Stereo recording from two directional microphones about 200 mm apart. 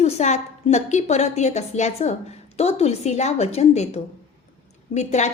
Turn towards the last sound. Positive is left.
turn(degrees=35)  # may be behind; listen again after turning